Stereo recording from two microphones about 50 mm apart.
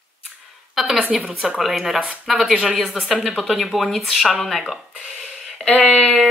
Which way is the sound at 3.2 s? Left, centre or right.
Centre.